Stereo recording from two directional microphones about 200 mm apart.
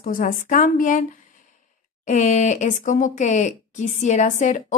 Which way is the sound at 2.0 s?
35° left (ahead or behind).